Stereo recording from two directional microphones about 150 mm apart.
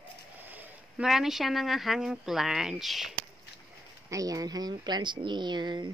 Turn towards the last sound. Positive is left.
turn(degrees=-30)  # may be behind; listen again after turning